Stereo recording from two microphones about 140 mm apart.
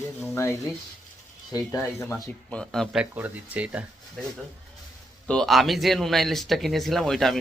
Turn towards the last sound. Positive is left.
turn(degrees=0)  # may be behind; listen again after turning